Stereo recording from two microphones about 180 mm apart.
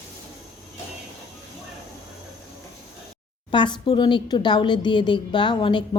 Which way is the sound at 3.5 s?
25° left (ahead or behind).